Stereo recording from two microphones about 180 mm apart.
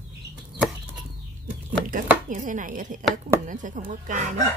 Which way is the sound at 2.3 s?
45° right (ahead or behind).